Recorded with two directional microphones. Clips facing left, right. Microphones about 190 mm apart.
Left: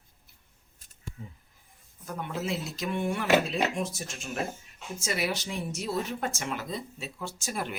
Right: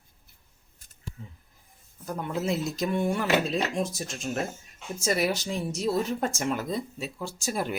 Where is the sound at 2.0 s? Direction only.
40° right (ahead or behind).